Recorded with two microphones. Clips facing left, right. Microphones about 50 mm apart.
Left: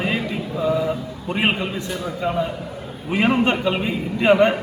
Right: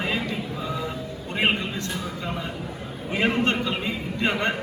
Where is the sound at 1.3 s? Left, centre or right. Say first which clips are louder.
Left 3 dB; centre.